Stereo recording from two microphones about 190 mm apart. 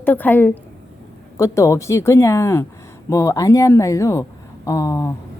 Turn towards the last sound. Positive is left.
turn(degrees=15)  # may be behind; listen again after turning